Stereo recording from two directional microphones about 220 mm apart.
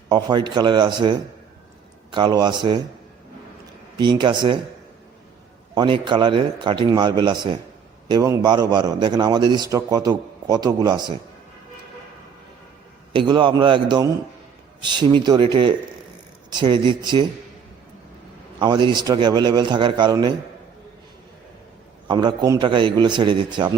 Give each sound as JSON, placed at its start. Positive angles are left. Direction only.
{"t": 0.1, "sound": "a man's voice", "side_deg": -20}
{"t": 2.1, "sound": "a man's voice", "side_deg": -20}
{"t": 3.9, "sound": "a man's voice", "side_deg": -20}
{"t": 5.7, "sound": "a man's voice", "side_deg": -20}
{"t": 13.1, "sound": "a man's voice", "side_deg": -20}
{"t": 18.6, "sound": "a man's voice", "side_deg": -20}
{"t": 22.0, "sound": "a man's voice", "side_deg": -20}